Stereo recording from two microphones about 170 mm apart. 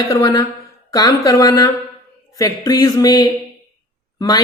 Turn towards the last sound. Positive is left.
turn(degrees=20)  # may be behind; listen again after turning